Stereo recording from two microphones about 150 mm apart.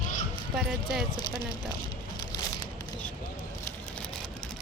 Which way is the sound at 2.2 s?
25° left (ahead or behind).